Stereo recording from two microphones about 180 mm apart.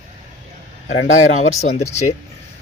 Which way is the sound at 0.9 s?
90° left.